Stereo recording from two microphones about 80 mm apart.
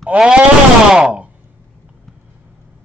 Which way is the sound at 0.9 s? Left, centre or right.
Centre.